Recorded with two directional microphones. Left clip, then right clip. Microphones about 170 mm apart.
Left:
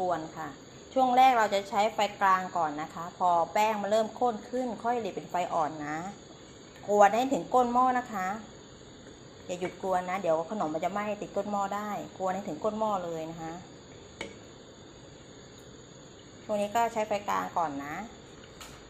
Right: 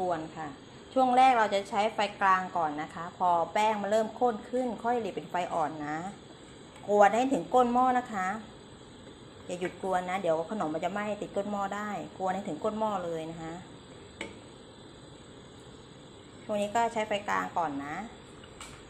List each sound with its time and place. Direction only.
0.9 s a woman's voice: 10° right (ahead or behind)
9.5 s a woman's voice: 10° right (ahead or behind)
16.4 s a woman's voice: 10° right (ahead or behind)